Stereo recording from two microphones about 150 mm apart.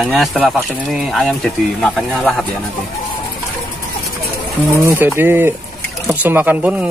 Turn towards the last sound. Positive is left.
turn(degrees=-10)  # may be behind; listen again after turning